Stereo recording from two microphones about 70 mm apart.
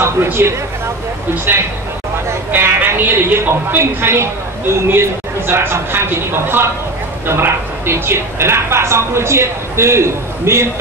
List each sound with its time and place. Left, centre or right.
0.0 s speech: right